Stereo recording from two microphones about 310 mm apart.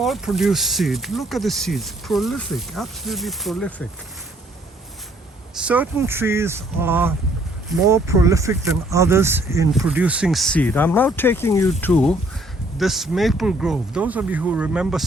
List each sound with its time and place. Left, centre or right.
0.0 s speech: centre
5.5 s speech: centre